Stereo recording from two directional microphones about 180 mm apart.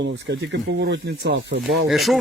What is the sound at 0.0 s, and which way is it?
Speech, 75° right (ahead or behind).